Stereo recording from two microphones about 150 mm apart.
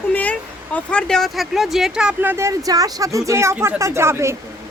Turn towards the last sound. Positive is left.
turn(degrees=-15)  # may be behind; listen again after turning